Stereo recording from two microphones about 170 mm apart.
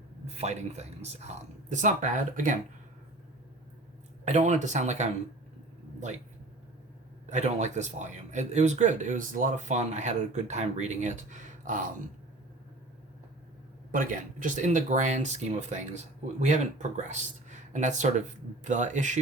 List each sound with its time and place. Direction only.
0.3 s speech: 40° right (ahead or behind)
4.3 s speech: 45° right (ahead or behind)
7.3 s speech: 40° right (ahead or behind)
13.9 s speech: 50° right (ahead or behind)